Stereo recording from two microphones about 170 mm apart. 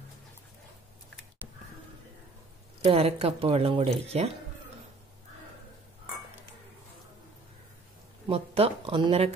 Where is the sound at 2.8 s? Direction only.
35° right (ahead or behind).